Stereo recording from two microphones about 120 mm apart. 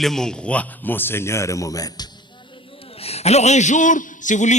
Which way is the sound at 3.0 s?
60° left (ahead or behind).